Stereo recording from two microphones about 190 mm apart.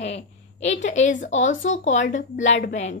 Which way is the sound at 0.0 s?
35° left (ahead or behind).